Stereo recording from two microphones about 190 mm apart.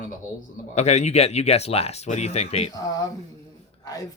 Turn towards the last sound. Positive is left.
turn(degrees=20)  # may be behind; listen again after turning